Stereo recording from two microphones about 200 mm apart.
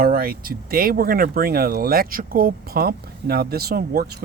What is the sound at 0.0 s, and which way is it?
Speech, 50° right (ahead or behind).